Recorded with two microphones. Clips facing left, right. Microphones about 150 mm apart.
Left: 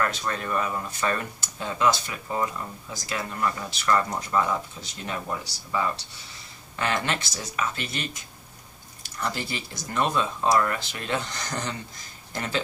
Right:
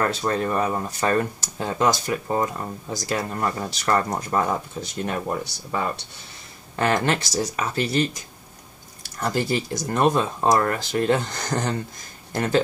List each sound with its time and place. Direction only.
0.0 s speech: 30° right (ahead or behind); by 6.0 s 55° right (ahead or behind)
6.8 s speech: 40° right (ahead or behind)
9.2 s speech: 45° right (ahead or behind)